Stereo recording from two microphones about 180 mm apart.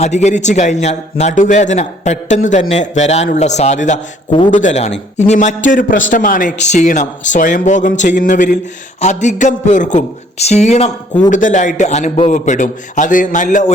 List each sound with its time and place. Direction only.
0.0 s a man's voice: 40° left (ahead or behind)